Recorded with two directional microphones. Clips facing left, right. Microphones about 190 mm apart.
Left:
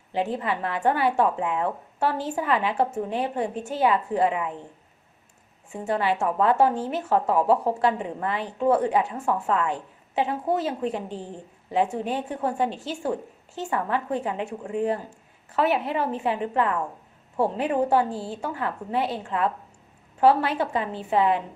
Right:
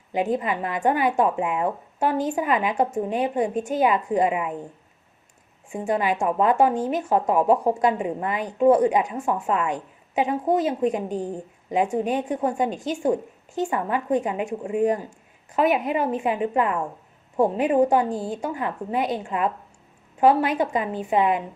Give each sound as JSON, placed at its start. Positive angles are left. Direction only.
{"t": 0.3, "sound": "a woman's voice", "side_deg": -15}
{"t": 5.7, "sound": "a woman's voice", "side_deg": -15}
{"t": 11.1, "sound": "a woman's voice", "side_deg": -40}
{"t": 11.7, "sound": "a woman's voice", "side_deg": -15}